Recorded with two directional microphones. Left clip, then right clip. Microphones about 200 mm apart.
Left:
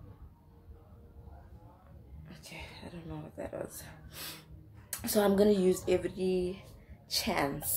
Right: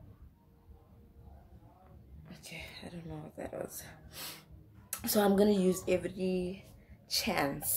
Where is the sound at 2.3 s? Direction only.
20° right (ahead or behind).